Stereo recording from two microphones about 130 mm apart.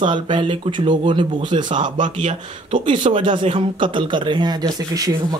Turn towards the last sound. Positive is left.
turn(degrees=-30)  # may be behind; listen again after turning